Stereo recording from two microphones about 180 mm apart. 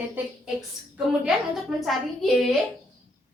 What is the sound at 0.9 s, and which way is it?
A woman's voice, centre (ahead or behind).